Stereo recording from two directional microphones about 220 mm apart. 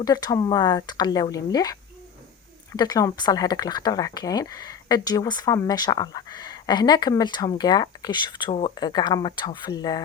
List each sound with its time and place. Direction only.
0.0 s speech: 15° left (ahead or behind)